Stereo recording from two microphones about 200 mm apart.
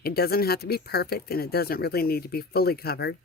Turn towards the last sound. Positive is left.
turn(degrees=50)  # may be behind; listen again after turning